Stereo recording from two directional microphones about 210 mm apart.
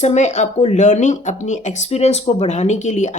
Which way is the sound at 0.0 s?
35° left (ahead or behind).